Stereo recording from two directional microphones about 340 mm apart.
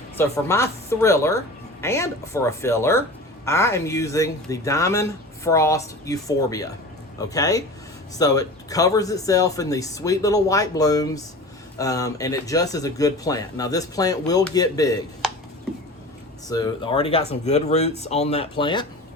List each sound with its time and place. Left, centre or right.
0.2 s speech: centre
16.5 s speech: centre